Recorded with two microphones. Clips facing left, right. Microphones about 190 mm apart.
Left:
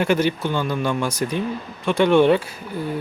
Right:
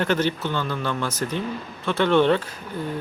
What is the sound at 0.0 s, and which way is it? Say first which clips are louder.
A man's voice: left 3 dB; 10° left (ahead or behind).